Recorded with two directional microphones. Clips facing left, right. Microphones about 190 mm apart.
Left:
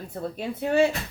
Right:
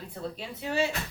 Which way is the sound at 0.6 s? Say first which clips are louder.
Left 8 dB; 55° left (ahead or behind).